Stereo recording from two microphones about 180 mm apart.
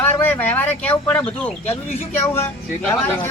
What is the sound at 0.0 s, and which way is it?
Speech, 10° left (ahead or behind).